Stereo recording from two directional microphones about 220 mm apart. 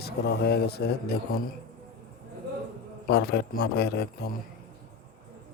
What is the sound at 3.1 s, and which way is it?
Speech, 50° left (ahead or behind).